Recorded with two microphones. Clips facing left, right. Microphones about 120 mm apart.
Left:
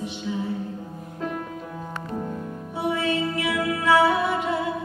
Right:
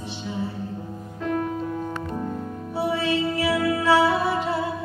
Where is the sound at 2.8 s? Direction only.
30° right (ahead or behind).